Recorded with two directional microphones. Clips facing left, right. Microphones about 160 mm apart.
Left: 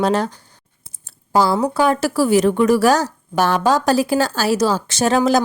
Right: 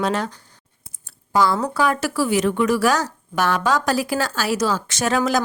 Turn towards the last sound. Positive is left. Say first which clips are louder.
# left 5 dB
turn(degrees=30)  # may be behind; listen again after turning